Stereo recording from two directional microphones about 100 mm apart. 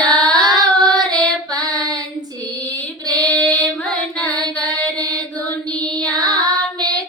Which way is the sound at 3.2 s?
15° left (ahead or behind).